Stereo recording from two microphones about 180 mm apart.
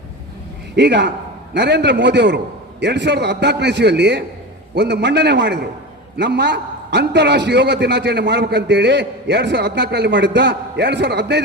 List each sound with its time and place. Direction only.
0.8 s a man's voice: 70° right (ahead or behind)